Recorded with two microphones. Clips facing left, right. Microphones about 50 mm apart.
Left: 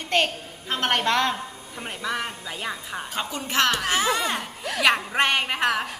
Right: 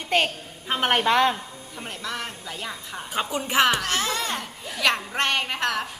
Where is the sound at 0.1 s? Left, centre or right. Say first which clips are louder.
Even; centre.